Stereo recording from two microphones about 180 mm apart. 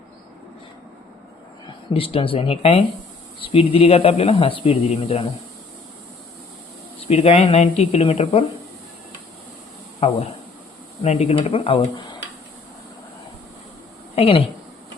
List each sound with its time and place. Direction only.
1.9 s a man's voice: 30° left (ahead or behind)
7.1 s a man's voice: 35° left (ahead or behind)
10.0 s a man's voice: 35° left (ahead or behind)
14.2 s speech: 30° left (ahead or behind)